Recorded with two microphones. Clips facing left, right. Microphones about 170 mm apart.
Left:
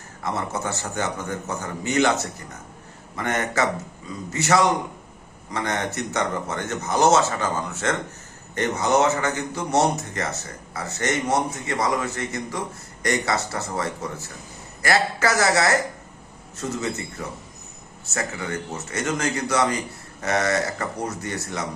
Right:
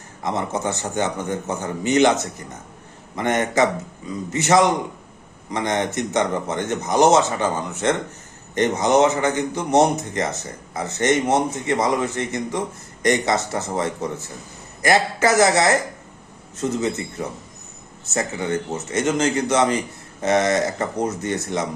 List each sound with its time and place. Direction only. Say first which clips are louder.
0.2 s a man's voice: right 3 dB; 20° right (ahead or behind)